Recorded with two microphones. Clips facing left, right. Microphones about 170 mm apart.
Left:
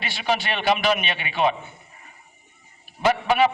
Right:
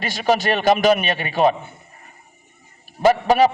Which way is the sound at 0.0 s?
40° right (ahead or behind).